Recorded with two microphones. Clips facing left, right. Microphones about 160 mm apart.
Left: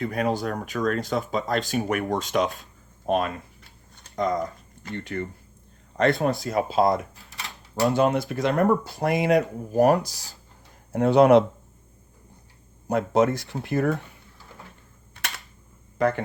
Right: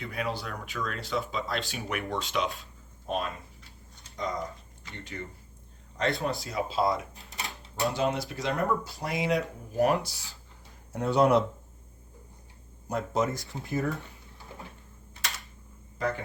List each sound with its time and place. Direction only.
0.0 s speech: 45° left (ahead or behind)
3.1 s a sound: 60° left (ahead or behind)
4.8 s speech: 55° left (ahead or behind)
7.2 s cash register: 20° right (ahead or behind)
7.9 s speech: 55° left (ahead or behind)
10.9 s speech: 65° left (ahead or behind)
12.9 s speech: 70° left (ahead or behind)
16.0 s speech: 65° left (ahead or behind)